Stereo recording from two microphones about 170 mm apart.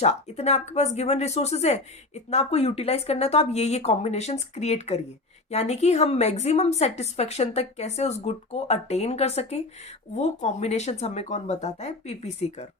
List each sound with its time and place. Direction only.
0.0 s a woman's voice: 40° left (ahead or behind)